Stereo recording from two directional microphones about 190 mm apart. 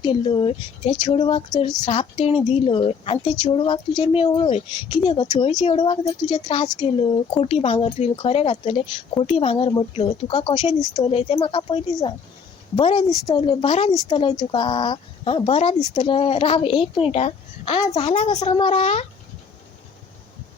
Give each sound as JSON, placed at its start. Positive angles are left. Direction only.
{"t": 0.0, "sound": "speech", "side_deg": 25}